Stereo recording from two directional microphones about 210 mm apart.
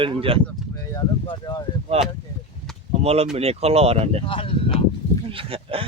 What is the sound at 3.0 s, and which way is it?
Speech, 30° right (ahead or behind).